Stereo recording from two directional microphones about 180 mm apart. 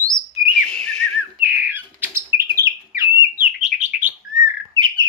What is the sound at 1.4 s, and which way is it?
Bird, 10° right (ahead or behind).